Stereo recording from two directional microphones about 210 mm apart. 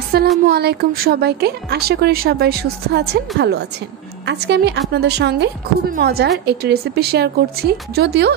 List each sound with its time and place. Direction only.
0.1 s a woman's voice: 50° right (ahead or behind)